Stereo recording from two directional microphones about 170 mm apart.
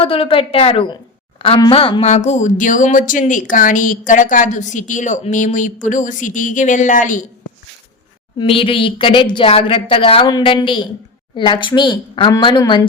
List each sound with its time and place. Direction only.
0.0 s speech: 35° left (ahead or behind); by 7.3 s 50° left (ahead or behind)
8.4 s a woman's voice: 30° left (ahead or behind)